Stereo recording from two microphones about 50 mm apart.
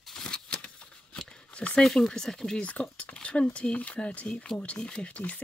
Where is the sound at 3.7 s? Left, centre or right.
Left.